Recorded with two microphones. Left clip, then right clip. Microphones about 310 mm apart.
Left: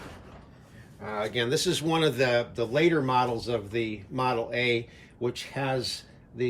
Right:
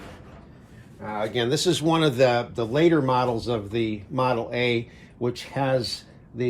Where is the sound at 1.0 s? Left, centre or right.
Centre.